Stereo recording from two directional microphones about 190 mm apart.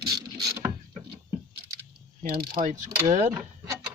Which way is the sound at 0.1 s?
20° right (ahead or behind).